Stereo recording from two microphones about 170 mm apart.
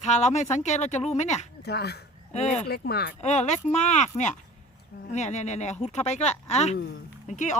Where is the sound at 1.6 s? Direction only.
70° left (ahead or behind).